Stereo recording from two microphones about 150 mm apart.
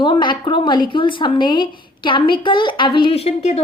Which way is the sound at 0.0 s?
30° left (ahead or behind).